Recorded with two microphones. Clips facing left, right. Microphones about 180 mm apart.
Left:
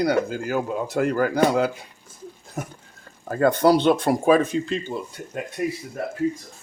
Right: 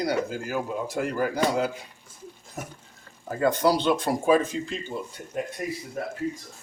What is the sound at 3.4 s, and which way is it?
Speech, 60° left (ahead or behind).